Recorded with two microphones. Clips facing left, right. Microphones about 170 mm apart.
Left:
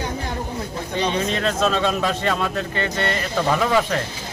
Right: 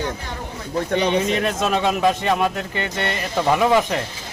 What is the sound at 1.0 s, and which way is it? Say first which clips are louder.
A man's voice: left 1 dB; 15° right (ahead or behind).